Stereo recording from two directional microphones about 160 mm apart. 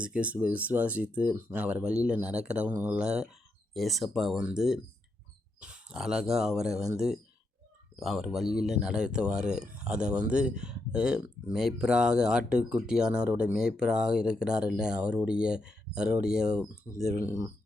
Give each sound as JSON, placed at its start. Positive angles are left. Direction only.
{"t": 0.0, "sound": "speech", "side_deg": -5}
{"t": 17.0, "sound": "speech", "side_deg": -45}